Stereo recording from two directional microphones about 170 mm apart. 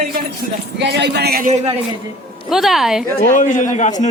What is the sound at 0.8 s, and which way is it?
Speech, 90° right.